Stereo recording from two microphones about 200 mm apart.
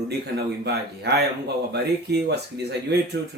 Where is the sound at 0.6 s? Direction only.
55° right (ahead or behind).